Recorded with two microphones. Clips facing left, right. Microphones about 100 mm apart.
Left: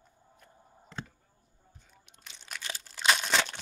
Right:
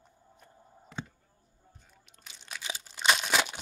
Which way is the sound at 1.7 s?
Centre (ahead or behind).